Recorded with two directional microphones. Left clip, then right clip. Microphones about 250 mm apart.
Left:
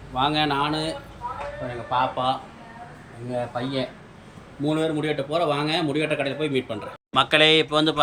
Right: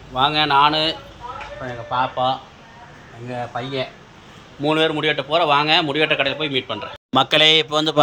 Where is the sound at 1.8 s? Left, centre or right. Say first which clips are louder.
Right 3 dB; right.